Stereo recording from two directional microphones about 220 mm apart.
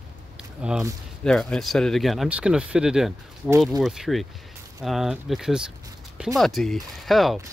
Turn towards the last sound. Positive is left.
turn(degrees=0)  # may be behind; listen again after turning